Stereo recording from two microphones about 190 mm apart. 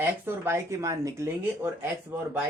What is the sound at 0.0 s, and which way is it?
Speech, 10° right (ahead or behind).